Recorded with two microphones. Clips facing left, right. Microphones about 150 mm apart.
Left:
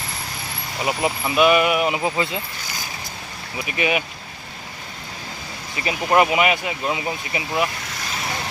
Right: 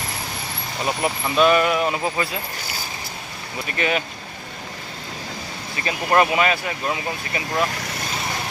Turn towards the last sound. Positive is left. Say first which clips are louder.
# even
turn(degrees=15)  # may be behind; listen again after turning